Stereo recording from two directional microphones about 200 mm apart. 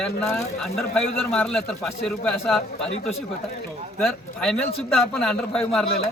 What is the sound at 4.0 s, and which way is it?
A man's voice, centre (ahead or behind).